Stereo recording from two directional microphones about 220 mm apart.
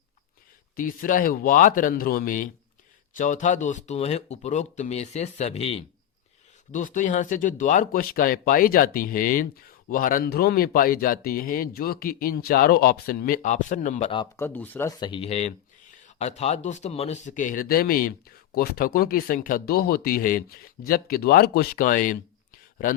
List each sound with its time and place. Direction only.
0.8 s speech: 40° left (ahead or behind)
14.1 s speech: 20° left (ahead or behind)
14.4 s speech: 10° left (ahead or behind); by 23.0 s 40° left (ahead or behind)